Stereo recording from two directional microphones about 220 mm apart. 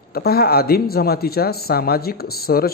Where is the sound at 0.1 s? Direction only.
45° left (ahead or behind).